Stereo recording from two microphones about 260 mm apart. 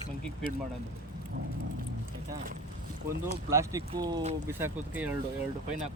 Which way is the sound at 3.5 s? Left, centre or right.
Centre.